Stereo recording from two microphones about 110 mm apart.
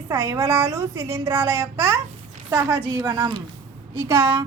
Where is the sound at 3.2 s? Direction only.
45° right (ahead or behind).